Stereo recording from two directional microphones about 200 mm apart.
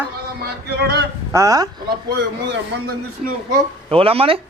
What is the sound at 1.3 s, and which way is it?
Speech, 15° right (ahead or behind).